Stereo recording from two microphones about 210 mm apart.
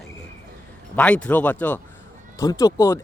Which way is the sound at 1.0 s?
5° left (ahead or behind).